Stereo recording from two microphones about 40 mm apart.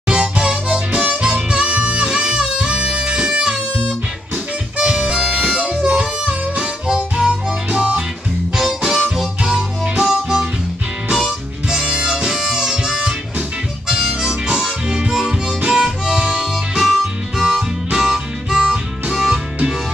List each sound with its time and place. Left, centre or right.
0.1 s harmonica: right
2.0 s music: right
4.7 s harmonica: right
5.8 s music: right
7.2 s harmonica: centre
8.5 s harmonica: centre
9.4 s harmonica: right
11.7 s harmonica: centre
16.3 s harmonica: centre
19.1 s music: centre